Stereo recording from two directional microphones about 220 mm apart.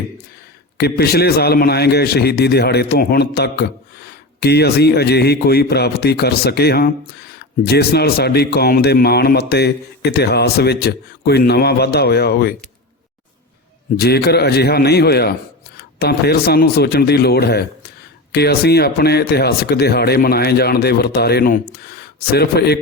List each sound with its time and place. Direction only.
0.8 s a man's voice: 45° left (ahead or behind)
13.9 s a man's voice: 45° left (ahead or behind)